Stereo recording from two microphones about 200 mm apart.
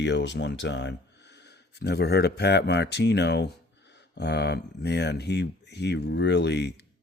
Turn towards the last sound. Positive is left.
turn(degrees=60)  # may be behind; listen again after turning